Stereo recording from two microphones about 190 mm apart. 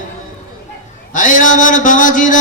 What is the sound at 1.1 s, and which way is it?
Mantra, 45° left (ahead or behind).